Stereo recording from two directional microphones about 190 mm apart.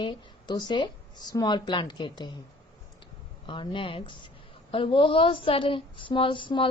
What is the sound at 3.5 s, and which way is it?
A woman's voice, 25° left (ahead or behind).